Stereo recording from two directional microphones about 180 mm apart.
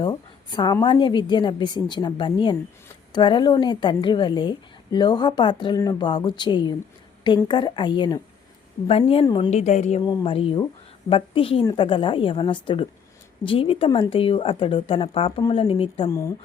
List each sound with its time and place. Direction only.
0.0 s a woman's voice: 25° left (ahead or behind)
9.5 s a woman's voice: 40° left (ahead or behind)
16.0 s speech: 15° left (ahead or behind)